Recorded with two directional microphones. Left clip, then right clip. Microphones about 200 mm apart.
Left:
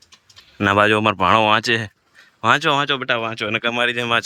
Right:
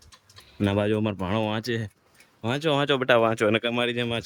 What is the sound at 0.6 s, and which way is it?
Speech, 5° right (ahead or behind).